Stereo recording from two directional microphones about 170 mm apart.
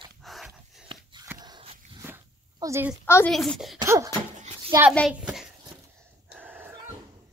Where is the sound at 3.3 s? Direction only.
Centre (ahead or behind).